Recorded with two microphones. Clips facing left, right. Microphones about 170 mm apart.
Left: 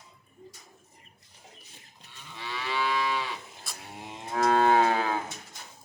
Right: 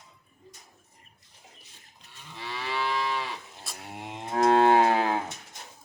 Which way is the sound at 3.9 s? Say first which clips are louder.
Right 4 dB; 15° right (ahead or behind).